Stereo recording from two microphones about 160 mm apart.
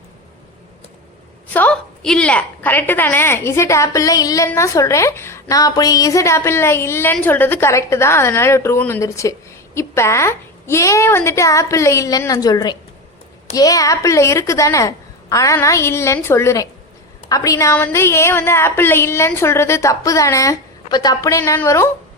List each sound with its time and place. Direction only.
1.5 s a woman's voice: 10° left (ahead or behind)